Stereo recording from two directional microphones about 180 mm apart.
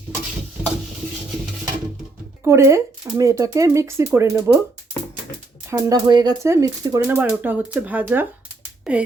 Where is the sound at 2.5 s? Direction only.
15° right (ahead or behind).